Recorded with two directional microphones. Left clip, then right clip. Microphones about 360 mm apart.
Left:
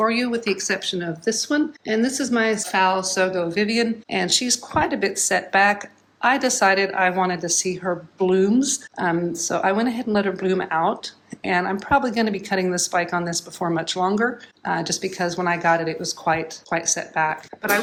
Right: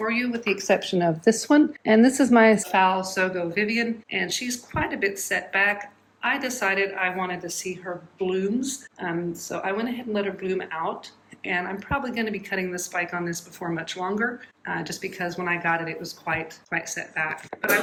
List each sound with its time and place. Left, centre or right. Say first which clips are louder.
0.0 s speech: left 5 dB; centre
0.9 s speech: right 3 dB; centre
2.6 s speech: left 1 dB; centre